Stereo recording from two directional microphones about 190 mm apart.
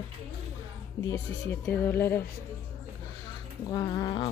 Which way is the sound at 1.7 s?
10° left (ahead or behind).